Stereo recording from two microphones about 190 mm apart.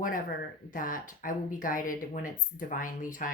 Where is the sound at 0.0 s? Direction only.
45° left (ahead or behind).